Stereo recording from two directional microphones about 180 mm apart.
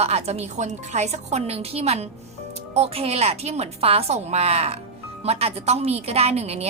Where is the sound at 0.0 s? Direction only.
35° right (ahead or behind).